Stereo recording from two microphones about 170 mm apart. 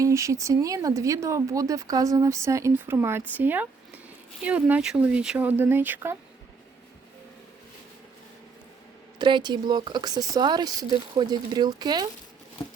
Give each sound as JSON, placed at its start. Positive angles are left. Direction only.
{"t": 0.0, "sound": "speech", "side_deg": -15}
{"t": 9.1, "sound": "speech", "side_deg": -25}